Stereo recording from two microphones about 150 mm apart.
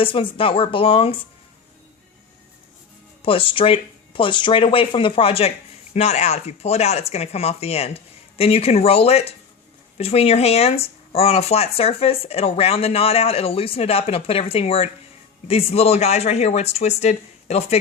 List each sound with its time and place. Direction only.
0.0 s speech: 35° left (ahead or behind)
3.2 s speech: 35° left (ahead or behind)